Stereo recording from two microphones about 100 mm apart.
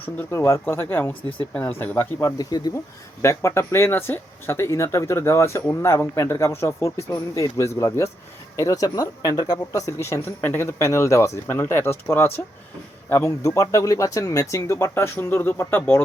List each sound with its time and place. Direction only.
0.0 s speech: 20° left (ahead or behind)
2.2 s speech: 40° left (ahead or behind)
3.2 s speech: 30° left (ahead or behind)